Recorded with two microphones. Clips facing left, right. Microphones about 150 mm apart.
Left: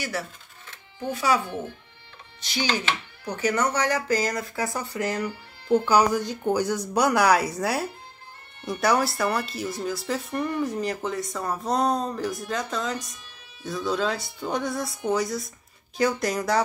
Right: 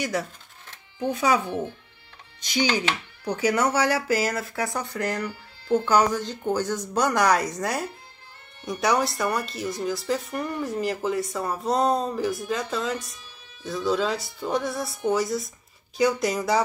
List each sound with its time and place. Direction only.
1.2 s a child's voice: 20° right (ahead or behind)
3.3 s speech: 10° right (ahead or behind)